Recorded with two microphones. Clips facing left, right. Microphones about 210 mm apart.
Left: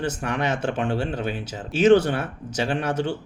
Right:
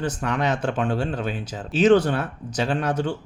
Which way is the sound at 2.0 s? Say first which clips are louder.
Right 1 dB; 10° left (ahead or behind).